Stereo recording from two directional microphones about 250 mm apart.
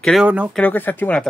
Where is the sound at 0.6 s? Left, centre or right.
Centre.